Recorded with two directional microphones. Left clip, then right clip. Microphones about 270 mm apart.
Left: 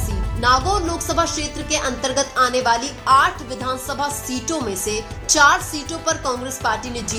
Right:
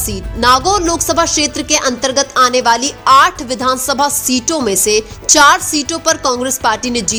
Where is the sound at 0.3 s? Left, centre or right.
Right.